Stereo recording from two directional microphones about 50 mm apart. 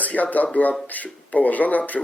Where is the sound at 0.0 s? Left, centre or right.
Left.